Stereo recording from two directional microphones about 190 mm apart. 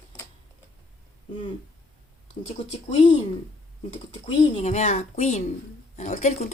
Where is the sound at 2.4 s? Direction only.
30° left (ahead or behind).